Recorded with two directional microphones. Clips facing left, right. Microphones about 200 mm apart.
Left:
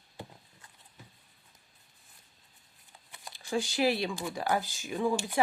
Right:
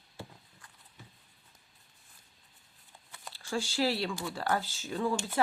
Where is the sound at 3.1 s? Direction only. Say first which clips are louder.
Left 3 dB; 15° left (ahead or behind).